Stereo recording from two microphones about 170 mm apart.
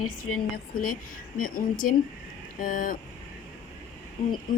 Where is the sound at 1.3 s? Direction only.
55° left (ahead or behind).